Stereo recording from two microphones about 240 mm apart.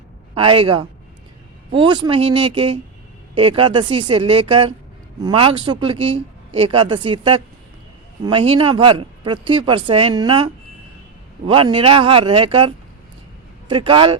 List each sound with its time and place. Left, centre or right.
0.3 s speech: right